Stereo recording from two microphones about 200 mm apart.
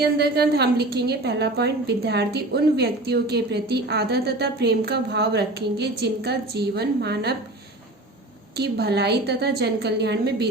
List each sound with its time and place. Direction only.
0.0 s a woman's voice: 55° right (ahead or behind)
8.5 s a woman's voice: 55° right (ahead or behind)